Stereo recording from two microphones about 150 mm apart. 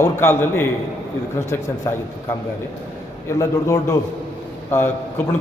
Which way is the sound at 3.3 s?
20° left (ahead or behind).